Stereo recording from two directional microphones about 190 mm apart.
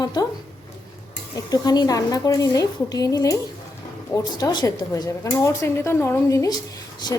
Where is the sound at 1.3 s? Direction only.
20° left (ahead or behind).